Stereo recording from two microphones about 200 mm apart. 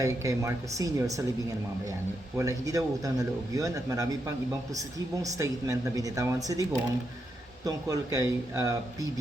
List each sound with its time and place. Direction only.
0.0 s speech: 15° right (ahead or behind)